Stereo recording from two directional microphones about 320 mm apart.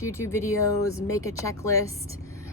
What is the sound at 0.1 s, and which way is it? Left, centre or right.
A woman's voice, centre.